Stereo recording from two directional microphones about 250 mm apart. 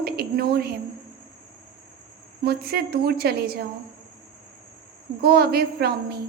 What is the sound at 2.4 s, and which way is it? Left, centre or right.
A woman's voice, right.